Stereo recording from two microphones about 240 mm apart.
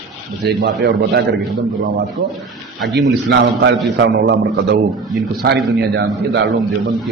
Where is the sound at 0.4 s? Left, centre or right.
Right.